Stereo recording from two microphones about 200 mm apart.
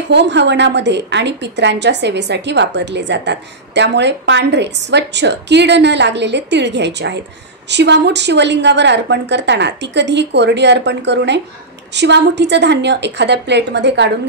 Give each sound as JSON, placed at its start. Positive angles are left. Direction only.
{"t": 0.1, "sound": "a woman's voice", "side_deg": -60}